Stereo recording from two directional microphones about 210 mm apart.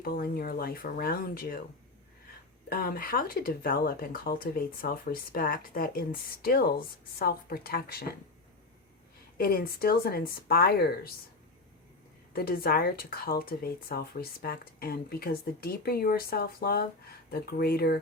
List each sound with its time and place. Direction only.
0.0 s speech: 45° left (ahead or behind)
2.6 s speech: 45° left (ahead or behind)
9.4 s speech: 45° left (ahead or behind)
12.3 s speech: 45° left (ahead or behind)